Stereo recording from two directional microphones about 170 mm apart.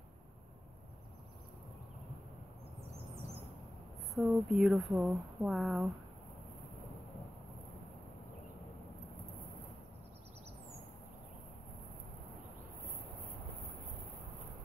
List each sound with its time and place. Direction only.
4.1 s speech: centre (ahead or behind)